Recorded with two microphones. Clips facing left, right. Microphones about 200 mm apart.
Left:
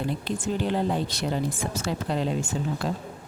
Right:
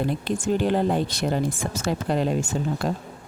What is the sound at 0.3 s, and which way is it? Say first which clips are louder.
Speech: right 5 dB; 50° right (ahead or behind).